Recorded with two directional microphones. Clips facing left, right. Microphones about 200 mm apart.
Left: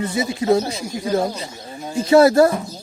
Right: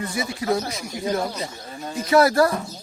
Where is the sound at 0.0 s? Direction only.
25° left (ahead or behind).